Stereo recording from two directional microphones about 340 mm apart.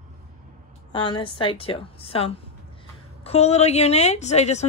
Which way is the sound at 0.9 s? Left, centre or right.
Centre.